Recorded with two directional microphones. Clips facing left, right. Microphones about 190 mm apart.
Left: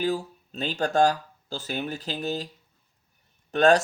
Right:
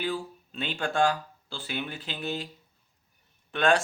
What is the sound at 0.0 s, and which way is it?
Speech, 40° left (ahead or behind).